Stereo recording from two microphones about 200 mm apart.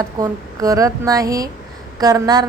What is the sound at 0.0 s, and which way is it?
A woman's voice, 15° right (ahead or behind).